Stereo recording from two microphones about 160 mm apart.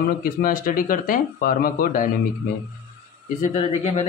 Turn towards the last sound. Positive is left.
turn(degrees=45)  # may be behind; listen again after turning